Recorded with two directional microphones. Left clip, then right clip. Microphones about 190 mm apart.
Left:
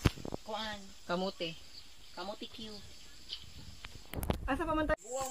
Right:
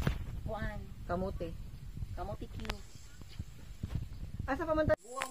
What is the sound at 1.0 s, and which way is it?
Speech, 50° left (ahead or behind).